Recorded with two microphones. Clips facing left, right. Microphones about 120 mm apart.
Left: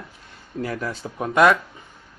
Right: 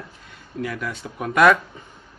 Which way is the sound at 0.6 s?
35° left (ahead or behind).